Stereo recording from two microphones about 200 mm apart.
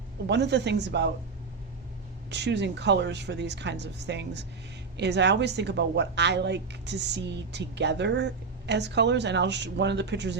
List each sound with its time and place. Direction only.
0.3 s speech: 60° right (ahead or behind)
2.3 s speech: 60° right (ahead or behind)